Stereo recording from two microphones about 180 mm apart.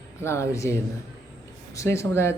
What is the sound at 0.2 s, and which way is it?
A man's voice, 15° left (ahead or behind).